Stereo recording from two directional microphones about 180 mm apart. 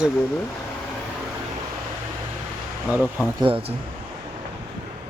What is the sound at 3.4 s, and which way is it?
Speech, 30° right (ahead or behind).